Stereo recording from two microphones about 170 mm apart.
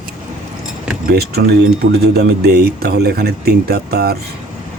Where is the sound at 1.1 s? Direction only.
70° right (ahead or behind).